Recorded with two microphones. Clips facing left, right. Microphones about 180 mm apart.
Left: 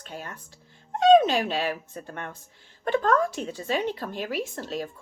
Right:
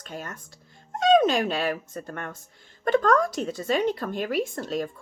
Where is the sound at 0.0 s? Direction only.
45° right (ahead or behind).